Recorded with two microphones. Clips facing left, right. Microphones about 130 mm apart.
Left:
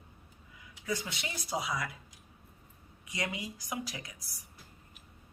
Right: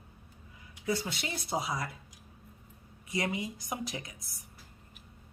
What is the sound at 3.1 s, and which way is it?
Speech, 25° right (ahead or behind).